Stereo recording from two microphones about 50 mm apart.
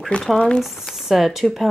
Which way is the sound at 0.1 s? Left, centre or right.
Left.